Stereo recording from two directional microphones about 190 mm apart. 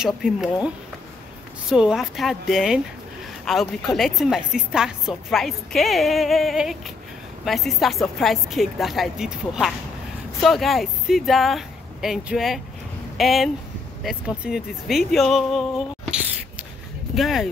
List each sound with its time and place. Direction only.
0.0 s a woman's voice: 5° right (ahead or behind)
1.7 s a woman's voice: 5° right (ahead or behind)